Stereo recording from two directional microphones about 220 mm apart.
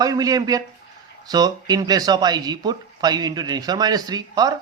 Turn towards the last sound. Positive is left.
turn(degrees=-15)  # may be behind; listen again after turning